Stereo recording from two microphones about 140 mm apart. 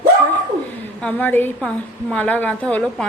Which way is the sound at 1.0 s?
10° left (ahead or behind).